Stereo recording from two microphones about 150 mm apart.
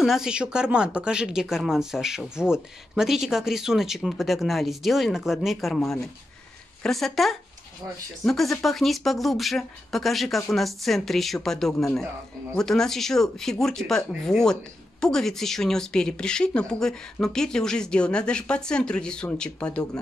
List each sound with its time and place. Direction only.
0.0 s speech: 5° right (ahead or behind)